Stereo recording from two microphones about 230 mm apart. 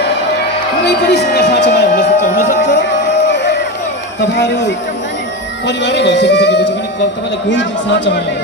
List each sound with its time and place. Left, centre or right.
0.8 s speech: left
2.6 s music: left
4.2 s speech: left